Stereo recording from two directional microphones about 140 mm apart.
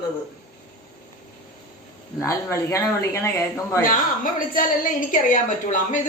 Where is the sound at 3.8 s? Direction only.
80° left; by 6.0 s 65° left (ahead or behind).